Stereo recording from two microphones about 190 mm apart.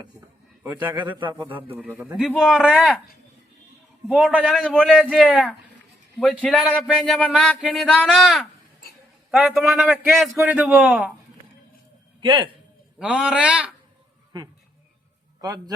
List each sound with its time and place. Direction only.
1.0 s speech: 10° right (ahead or behind)
4.1 s speech: 5° right (ahead or behind)
12.2 s a man's voice: 25° right (ahead or behind)
13.0 s speech: 5° right (ahead or behind)
15.4 s a man's voice: 20° right (ahead or behind)